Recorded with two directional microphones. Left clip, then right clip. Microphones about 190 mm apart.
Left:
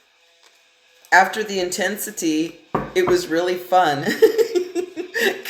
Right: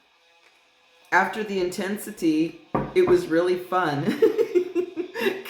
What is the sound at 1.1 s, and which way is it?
Speech, 15° right (ahead or behind).